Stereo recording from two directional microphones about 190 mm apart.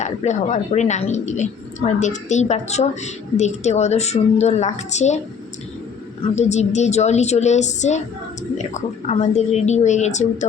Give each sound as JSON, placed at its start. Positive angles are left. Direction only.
{"t": 0.0, "sound": "a woman's voice", "side_deg": 40}
{"t": 6.3, "sound": "a woman's voice", "side_deg": 35}